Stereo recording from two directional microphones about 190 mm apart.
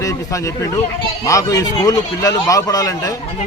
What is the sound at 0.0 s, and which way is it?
A man's voice, 15° left (ahead or behind).